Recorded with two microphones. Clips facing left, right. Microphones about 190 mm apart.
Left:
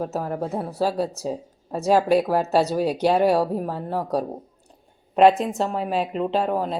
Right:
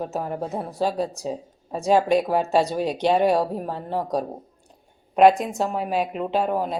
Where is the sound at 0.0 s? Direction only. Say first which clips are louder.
Left 1 dB; centre (ahead or behind).